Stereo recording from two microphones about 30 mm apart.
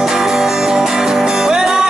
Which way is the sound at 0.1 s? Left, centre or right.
Centre.